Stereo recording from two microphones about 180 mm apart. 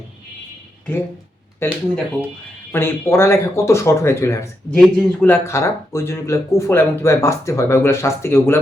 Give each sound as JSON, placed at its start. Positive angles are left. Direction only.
{"t": 1.6, "sound": "speech", "side_deg": 15}